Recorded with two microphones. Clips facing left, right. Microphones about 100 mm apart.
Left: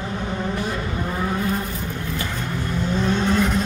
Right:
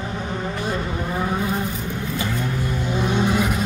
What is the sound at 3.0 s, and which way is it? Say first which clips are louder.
Vehicle: even; 15° right (ahead or behind).